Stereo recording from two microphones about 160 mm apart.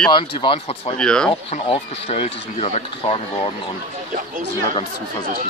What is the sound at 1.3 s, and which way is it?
Speech, 35° left (ahead or behind).